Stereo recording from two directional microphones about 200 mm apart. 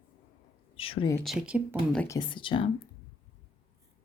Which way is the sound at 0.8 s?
30° left (ahead or behind).